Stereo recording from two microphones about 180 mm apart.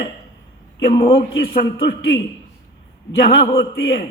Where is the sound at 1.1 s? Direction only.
70° left (ahead or behind).